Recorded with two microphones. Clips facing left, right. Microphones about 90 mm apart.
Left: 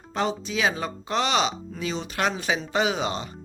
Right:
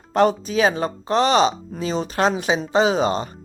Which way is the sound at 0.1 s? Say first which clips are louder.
Right 9 dB; 55° right (ahead or behind).